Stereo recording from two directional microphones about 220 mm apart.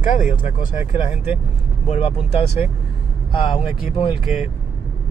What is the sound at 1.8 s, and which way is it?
Speech, 30° left (ahead or behind).